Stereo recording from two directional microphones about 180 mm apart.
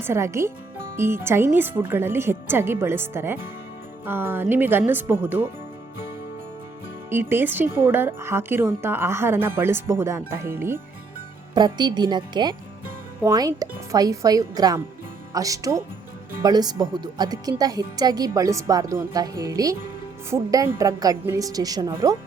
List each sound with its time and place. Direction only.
0.0 s speech: 15° right (ahead or behind)
7.1 s speech: 10° right (ahead or behind)
11.5 s speech: 25° right (ahead or behind)